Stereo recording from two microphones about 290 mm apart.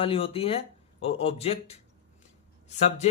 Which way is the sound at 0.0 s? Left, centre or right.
Centre.